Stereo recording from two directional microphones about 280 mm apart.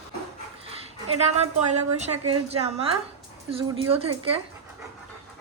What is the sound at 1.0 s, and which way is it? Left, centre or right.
A woman's voice, right.